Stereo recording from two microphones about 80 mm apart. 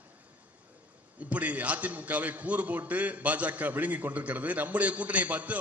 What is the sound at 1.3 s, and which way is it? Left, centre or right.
A man's voice, centre.